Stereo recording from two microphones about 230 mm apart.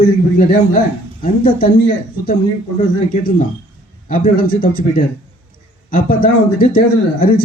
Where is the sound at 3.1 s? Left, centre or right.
Left.